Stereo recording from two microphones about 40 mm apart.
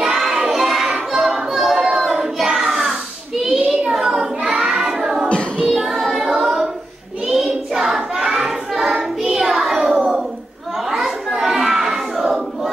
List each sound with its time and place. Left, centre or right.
0.0 s child singing: centre
0.5 s a sound: centre
2.6 s child singing: centre
5.3 s child singing: left
5.7 s child singing: centre
10.9 s a sound: centre